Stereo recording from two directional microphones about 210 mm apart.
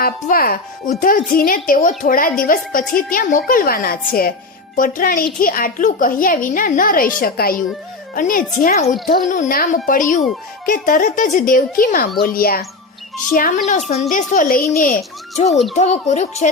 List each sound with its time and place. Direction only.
0.0 s a child's voice: 45° left (ahead or behind)
15.4 s a child's voice: centre (ahead or behind)
15.8 s speech: 35° left (ahead or behind)